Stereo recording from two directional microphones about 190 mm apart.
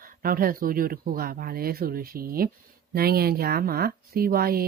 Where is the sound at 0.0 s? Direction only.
50° right (ahead or behind).